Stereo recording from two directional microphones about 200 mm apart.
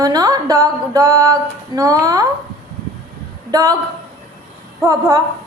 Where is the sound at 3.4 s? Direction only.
20° right (ahead or behind).